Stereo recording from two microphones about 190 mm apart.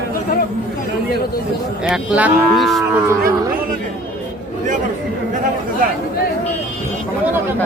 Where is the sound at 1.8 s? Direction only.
5° right (ahead or behind).